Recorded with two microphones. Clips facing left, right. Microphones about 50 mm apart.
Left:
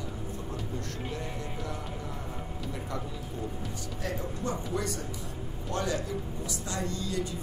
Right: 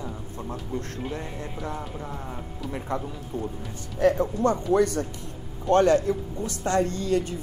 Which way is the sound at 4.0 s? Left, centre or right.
Right.